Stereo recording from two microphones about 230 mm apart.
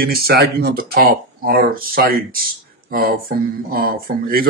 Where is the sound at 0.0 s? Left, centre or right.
Right.